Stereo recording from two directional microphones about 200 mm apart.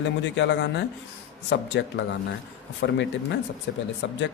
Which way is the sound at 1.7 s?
65° left (ahead or behind).